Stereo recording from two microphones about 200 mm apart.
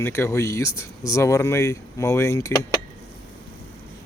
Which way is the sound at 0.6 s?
90° left.